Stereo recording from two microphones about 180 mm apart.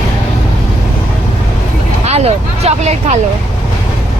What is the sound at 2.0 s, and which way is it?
Vehicle, 35° right (ahead or behind).